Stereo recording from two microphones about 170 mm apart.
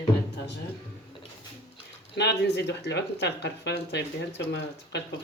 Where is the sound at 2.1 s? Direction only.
80° left.